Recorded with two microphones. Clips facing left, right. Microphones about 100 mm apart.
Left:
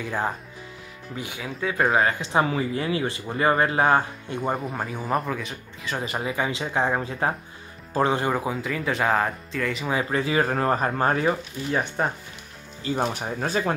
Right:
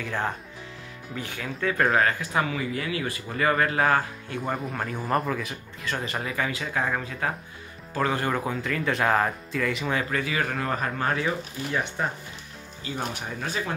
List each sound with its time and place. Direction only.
0.0 s speech: 10° left (ahead or behind)
2.0 s speech: 25° left (ahead or behind)
4.4 s speech: centre (ahead or behind)
6.0 s speech: 15° left (ahead or behind)
8.4 s speech: 5° left (ahead or behind)
10.0 s speech: 30° left (ahead or behind)
13.2 s speech: 40° left (ahead or behind)